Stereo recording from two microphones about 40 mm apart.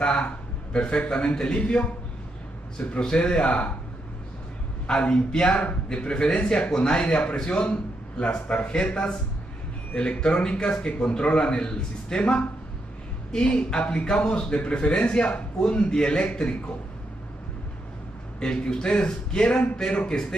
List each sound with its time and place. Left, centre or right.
0.0 s a man's voice: left
3.0 s a man's voice: left
4.8 s a man's voice: left
18.4 s a man's voice: left